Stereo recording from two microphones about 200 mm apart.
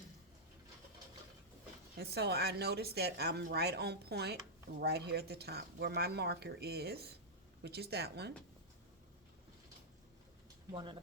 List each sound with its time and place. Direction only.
2.0 s speech: 55° right (ahead or behind)
10.7 s speech: 25° right (ahead or behind)